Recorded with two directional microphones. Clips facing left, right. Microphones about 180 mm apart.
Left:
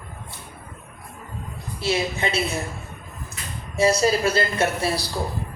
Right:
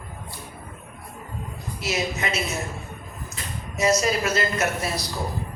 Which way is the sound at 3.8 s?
30° left (ahead or behind).